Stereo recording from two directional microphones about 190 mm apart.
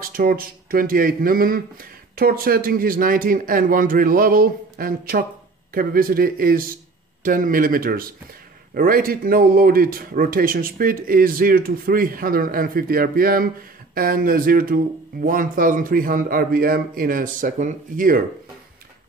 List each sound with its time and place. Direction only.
0.0 s speech: 50° right (ahead or behind)